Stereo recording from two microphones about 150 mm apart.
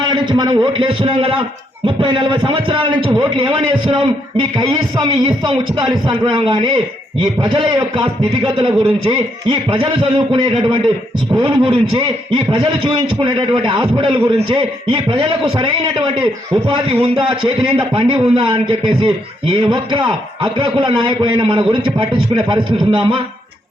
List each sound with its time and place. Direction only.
0.0 s a man's voice: 30° right (ahead or behind)